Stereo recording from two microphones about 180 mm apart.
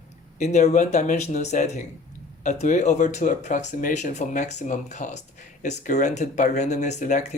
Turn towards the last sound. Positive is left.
turn(degrees=45)  # may be behind; listen again after turning